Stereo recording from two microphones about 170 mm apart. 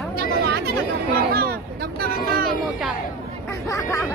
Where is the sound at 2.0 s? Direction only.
60° right (ahead or behind).